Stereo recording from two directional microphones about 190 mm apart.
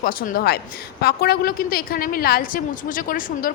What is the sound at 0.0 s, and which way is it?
A woman's voice, 50° left (ahead or behind).